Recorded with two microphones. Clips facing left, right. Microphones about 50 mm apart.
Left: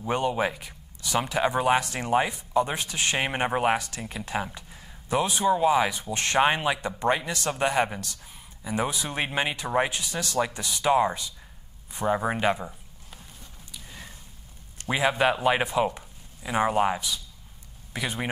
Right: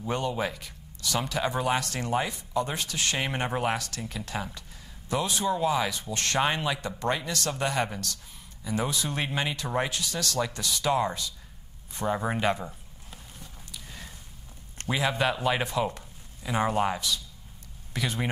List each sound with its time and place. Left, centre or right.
0.0 s a man's voice: left
11.9 s walk: centre
14.9 s a man's voice: centre